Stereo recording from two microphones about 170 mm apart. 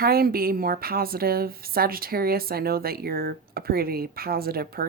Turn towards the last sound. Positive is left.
turn(degrees=-65)  # may be behind; listen again after turning